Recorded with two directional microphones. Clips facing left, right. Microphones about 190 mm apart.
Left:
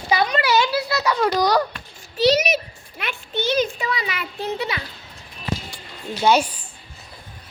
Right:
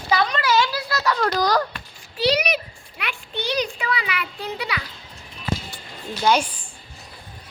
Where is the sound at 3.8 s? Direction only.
40° left (ahead or behind).